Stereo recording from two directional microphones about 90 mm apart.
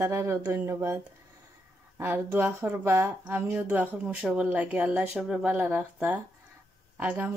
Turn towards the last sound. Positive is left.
turn(degrees=-20)  # may be behind; listen again after turning